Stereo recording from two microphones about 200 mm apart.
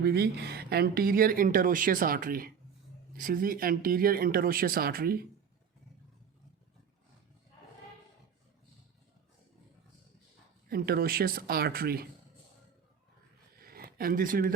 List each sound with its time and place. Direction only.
0.0 s speech: 50° right (ahead or behind)
10.7 s speech: 50° right (ahead or behind)
13.6 s a sound: 50° right (ahead or behind)